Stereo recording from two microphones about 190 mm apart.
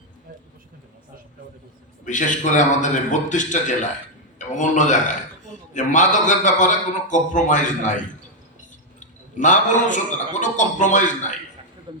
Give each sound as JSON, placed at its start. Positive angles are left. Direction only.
{"t": 2.0, "sound": "a man's voice", "side_deg": 40}
{"t": 9.0, "sound": "a man's voice", "side_deg": 40}
{"t": 11.9, "sound": "a sound", "side_deg": -25}